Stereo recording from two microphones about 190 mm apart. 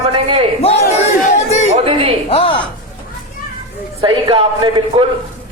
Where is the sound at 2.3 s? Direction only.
30° left (ahead or behind).